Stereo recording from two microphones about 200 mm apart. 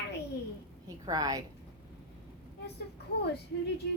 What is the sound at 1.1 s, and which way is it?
Speech, 20° right (ahead or behind).